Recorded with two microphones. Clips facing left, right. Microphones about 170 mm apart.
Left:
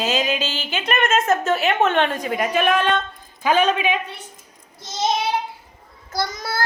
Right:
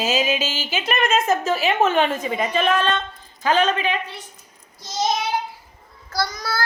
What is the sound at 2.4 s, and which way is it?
Speech, 10° left (ahead or behind).